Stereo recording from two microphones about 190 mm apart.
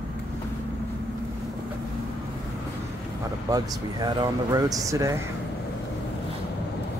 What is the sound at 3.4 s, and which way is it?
Speech, 20° right (ahead or behind).